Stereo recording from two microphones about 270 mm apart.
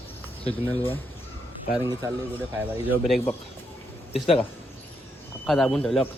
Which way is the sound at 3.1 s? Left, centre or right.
Centre.